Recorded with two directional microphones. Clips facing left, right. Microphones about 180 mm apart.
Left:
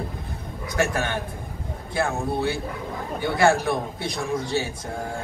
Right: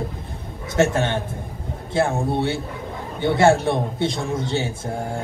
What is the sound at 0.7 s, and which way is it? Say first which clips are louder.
Speech: right 5 dB; 25° right (ahead or behind).